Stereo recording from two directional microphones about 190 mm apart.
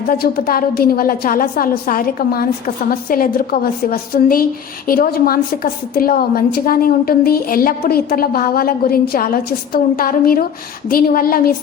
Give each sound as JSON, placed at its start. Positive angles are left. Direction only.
{"t": 0.1, "sound": "a woman's voice", "side_deg": 50}